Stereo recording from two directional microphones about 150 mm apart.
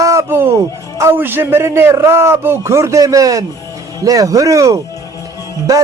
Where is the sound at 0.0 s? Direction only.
20° right (ahead or behind).